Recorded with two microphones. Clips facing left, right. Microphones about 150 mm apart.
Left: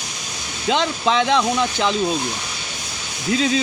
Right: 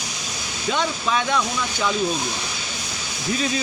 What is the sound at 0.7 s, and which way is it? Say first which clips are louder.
Speech: left 4 dB; 25° left (ahead or behind).